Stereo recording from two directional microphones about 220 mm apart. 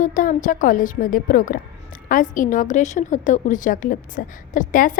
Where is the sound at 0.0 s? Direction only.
35° left (ahead or behind).